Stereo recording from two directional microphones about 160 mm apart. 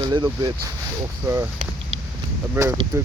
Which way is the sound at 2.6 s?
15° right (ahead or behind).